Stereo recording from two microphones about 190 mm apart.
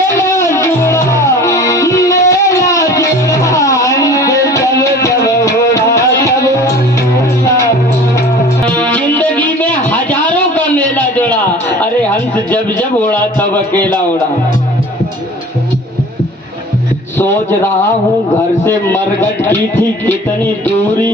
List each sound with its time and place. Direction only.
0.3 s music: 15° left (ahead or behind)
8.8 s music: 10° left (ahead or behind)
13.0 s a sound: 10° left (ahead or behind)
18.6 s a man's voice: 10° left (ahead or behind)